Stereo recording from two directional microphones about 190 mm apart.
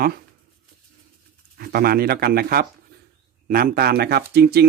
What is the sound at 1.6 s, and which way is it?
Speech, 55° right (ahead or behind).